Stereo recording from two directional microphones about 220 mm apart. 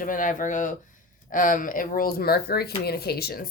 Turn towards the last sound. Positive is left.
turn(degrees=45)  # may be behind; listen again after turning